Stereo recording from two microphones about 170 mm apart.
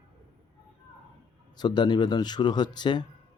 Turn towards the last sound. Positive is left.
turn(degrees=25)  # may be behind; listen again after turning